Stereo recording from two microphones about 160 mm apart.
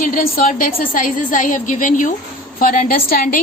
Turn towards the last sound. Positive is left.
turn(degrees=65)  # may be behind; listen again after turning